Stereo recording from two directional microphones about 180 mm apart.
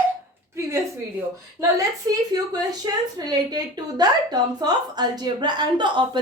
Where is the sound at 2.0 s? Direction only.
20° right (ahead or behind).